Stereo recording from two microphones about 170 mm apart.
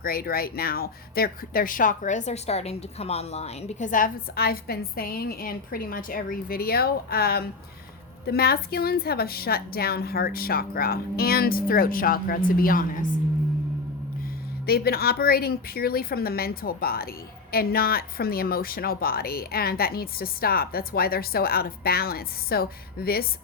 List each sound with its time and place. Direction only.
0.0 s a woman's voice: 60° left (ahead or behind)
14.7 s a woman's voice: 65° left (ahead or behind)